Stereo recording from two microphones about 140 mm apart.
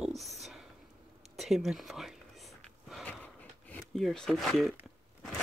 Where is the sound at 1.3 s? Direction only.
Centre (ahead or behind).